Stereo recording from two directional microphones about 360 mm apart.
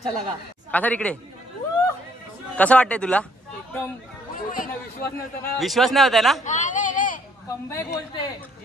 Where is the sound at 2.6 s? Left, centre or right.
Centre.